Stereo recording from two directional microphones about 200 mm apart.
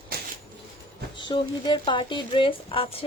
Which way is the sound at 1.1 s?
25° left (ahead or behind).